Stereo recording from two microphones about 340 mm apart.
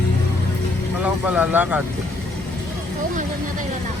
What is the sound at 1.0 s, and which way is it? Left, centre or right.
Speech, centre.